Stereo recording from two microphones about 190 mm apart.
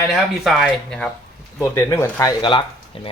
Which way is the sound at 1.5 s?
15° left (ahead or behind).